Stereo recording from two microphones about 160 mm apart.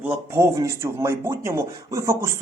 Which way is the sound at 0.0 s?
15° right (ahead or behind).